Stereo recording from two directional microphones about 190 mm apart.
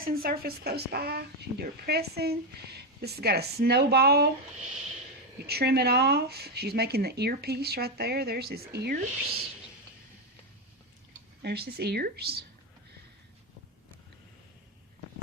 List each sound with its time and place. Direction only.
0.0 s speech: 50° right (ahead or behind)
5.5 s speech: 55° right (ahead or behind)
11.4 s speech: 55° right (ahead or behind)